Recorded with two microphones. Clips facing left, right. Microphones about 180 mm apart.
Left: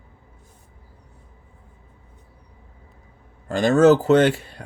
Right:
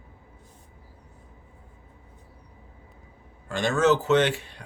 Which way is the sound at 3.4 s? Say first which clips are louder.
Left 7 dB; 40° left (ahead or behind).